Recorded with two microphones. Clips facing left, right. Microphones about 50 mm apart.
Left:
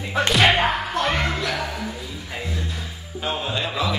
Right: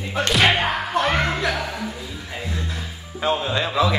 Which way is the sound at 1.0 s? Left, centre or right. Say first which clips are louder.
Right 5 dB; right.